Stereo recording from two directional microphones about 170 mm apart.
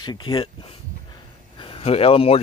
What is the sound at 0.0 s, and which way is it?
Speech, 25° left (ahead or behind).